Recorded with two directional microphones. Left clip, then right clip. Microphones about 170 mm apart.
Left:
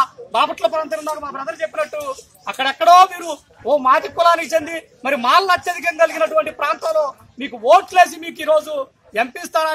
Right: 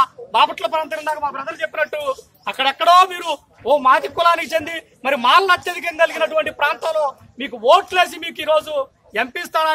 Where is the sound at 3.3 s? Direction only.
5° right (ahead or behind).